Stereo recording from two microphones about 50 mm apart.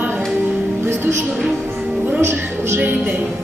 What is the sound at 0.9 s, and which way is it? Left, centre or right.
Music, right.